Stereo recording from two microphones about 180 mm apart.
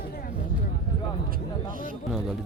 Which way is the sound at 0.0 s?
55° left (ahead or behind).